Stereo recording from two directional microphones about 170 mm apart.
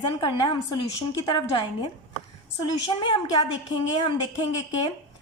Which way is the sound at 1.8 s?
25° left (ahead or behind).